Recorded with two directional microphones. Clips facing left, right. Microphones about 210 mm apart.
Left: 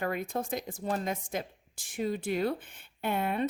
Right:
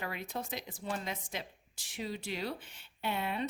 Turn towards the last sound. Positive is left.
turn(degrees=50)  # may be behind; listen again after turning